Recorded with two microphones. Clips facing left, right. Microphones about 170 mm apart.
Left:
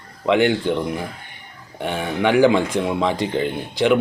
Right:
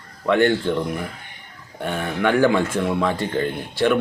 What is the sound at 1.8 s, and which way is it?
Speech, 5° left (ahead or behind).